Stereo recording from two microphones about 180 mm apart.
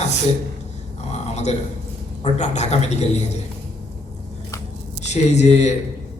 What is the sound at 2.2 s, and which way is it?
A man's voice, 40° left (ahead or behind).